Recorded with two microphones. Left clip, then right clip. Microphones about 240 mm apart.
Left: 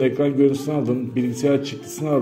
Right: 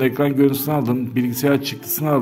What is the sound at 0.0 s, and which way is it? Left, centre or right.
A man's voice, right.